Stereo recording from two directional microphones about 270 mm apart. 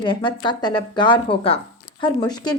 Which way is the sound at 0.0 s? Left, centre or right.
Centre.